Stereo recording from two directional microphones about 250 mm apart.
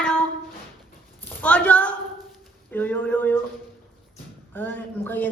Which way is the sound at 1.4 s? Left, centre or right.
Centre.